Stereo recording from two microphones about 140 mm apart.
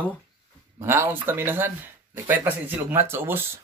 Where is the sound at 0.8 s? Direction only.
15° right (ahead or behind).